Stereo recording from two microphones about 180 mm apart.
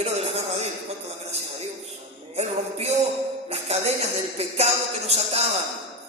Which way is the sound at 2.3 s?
35° right (ahead or behind).